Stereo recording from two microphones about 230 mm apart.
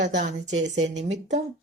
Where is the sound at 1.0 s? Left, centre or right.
Right.